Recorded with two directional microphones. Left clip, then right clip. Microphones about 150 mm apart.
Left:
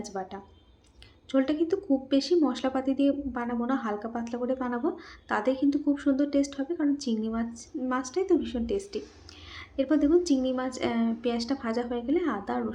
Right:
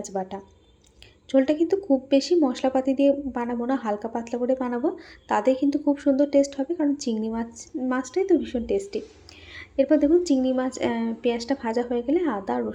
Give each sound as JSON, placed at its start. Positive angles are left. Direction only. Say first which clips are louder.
{"t": 0.0, "sound": "speech", "louder": "right 6 dB", "side_deg": -15}